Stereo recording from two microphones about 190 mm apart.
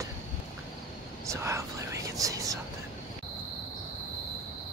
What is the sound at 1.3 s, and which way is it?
Whispering, 15° right (ahead or behind).